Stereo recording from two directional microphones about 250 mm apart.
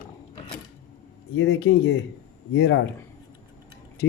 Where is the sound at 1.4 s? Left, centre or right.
Left.